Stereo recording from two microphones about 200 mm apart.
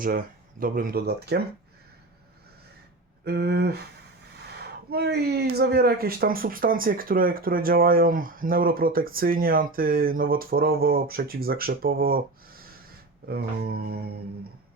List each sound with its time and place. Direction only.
0.6 s speech: 45° right (ahead or behind)
3.2 s speech: 55° right (ahead or behind)
13.2 s speech: 50° right (ahead or behind)